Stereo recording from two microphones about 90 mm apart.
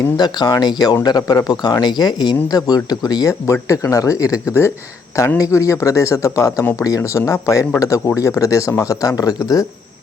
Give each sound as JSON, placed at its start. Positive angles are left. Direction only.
{"t": 0.2, "sound": "speech", "side_deg": 50}